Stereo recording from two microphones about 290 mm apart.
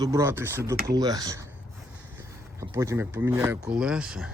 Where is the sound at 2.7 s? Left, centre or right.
Centre.